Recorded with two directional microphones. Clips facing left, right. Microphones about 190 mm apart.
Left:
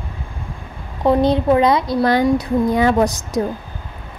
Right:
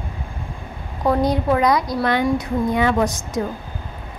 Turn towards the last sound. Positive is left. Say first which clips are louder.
# left 3 dB
turn(degrees=35)  # may be behind; listen again after turning